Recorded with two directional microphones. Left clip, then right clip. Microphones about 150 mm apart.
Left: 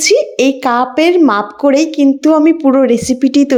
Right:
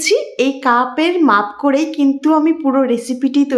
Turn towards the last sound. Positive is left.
turn(degrees=40)  # may be behind; listen again after turning